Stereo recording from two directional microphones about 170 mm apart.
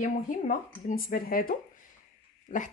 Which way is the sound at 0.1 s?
50° left (ahead or behind).